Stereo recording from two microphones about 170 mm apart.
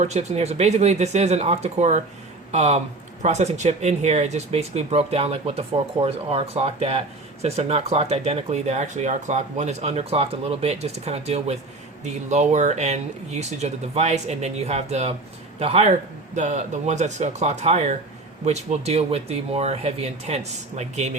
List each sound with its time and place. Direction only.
0.0 s a man's voice: 40° right (ahead or behind)